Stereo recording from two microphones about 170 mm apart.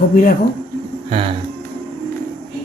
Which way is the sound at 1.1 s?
35° right (ahead or behind).